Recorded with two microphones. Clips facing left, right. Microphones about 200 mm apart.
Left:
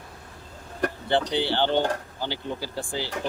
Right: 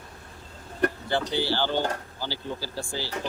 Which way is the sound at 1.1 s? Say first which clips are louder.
Left 3 dB; 25° left (ahead or behind).